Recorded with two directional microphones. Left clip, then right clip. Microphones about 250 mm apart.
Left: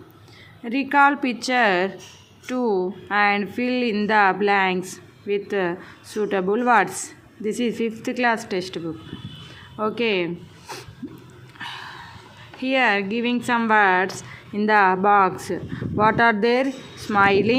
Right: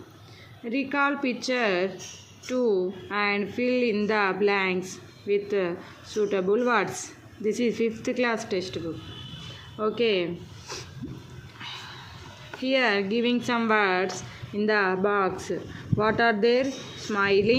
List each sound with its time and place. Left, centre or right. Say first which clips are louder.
0.6 s a woman's voice: left 8 dB; centre
11.6 s a sound: left 5 dB; centre
12.6 s a woman's voice: left 4 dB; centre